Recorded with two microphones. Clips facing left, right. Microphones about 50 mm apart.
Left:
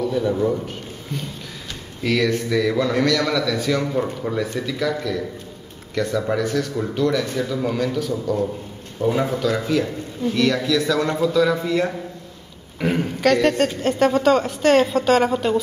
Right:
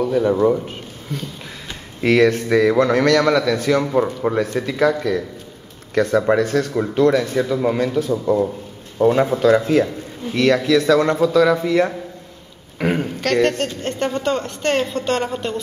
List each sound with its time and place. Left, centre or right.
0.0 s speech: right
2.0 s a man's voice: right
9.4 s speech: right
12.7 s speech: centre
13.0 s a woman's voice: centre